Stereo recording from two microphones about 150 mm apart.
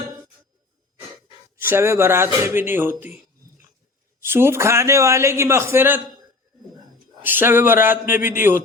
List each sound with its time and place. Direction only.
1.7 s a man's voice: 15° right (ahead or behind)
4.3 s a man's voice: 15° right (ahead or behind)
7.2 s a man's voice: 15° right (ahead or behind)